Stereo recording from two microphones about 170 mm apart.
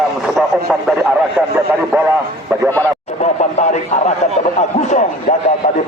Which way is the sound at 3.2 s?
40° left (ahead or behind).